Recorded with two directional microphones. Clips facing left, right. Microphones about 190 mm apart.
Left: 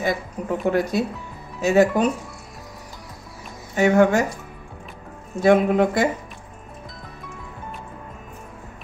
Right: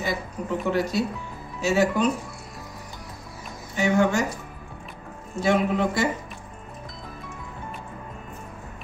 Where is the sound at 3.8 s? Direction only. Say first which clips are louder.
Left 5 dB; 55° left (ahead or behind).